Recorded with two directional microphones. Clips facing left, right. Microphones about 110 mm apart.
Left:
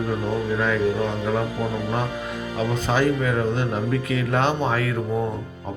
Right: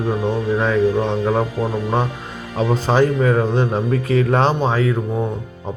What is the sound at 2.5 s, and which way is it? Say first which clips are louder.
Speech: right 6 dB; 35° right (ahead or behind).